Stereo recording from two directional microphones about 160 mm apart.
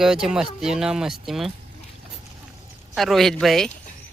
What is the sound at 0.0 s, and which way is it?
Speech, 5° right (ahead or behind).